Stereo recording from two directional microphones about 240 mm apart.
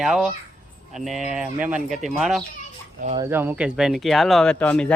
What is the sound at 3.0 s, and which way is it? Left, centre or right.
Speech, right.